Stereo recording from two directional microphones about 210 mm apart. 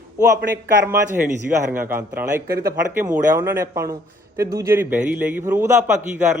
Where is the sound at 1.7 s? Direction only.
10° right (ahead or behind).